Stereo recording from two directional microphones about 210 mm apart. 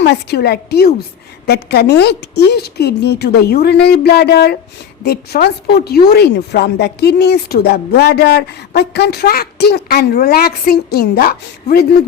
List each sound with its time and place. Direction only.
0.0 s a woman's voice: 55° left (ahead or behind)